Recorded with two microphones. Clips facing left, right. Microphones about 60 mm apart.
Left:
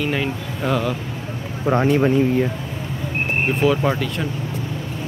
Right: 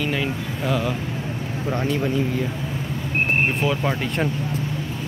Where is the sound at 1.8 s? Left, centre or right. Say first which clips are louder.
Left 7 dB; left.